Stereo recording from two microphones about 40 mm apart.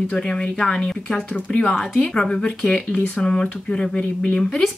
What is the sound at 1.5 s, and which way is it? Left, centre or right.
Speech, left.